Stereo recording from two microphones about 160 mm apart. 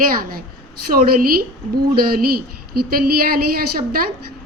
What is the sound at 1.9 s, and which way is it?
A woman's voice, 70° right (ahead or behind).